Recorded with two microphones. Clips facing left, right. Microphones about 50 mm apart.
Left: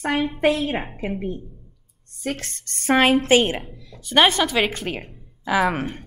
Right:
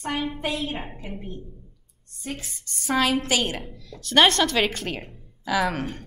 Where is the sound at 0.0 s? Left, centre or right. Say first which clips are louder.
Left 8 dB; left.